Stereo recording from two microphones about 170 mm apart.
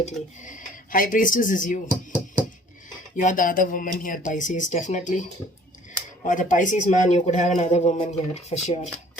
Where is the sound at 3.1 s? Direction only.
50° left (ahead or behind).